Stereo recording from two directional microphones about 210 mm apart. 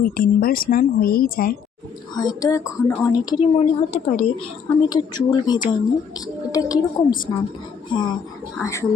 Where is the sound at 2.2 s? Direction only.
20° left (ahead or behind).